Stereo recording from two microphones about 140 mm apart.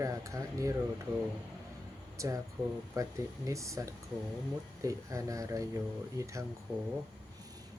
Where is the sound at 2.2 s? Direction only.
20° right (ahead or behind).